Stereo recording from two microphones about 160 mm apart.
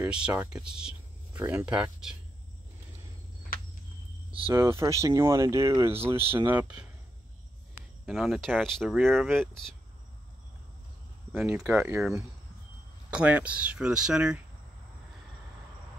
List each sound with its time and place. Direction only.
0.0 s speech: 5° right (ahead or behind)
3.5 s cricket: 65° left (ahead or behind)
4.7 s speech: 20° right (ahead or behind)
8.0 s speech: centre (ahead or behind)
11.3 s speech: 10° right (ahead or behind)
13.1 s speech: 10° right (ahead or behind)